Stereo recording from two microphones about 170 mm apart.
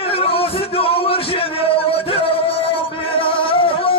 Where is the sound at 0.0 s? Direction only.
35° left (ahead or behind).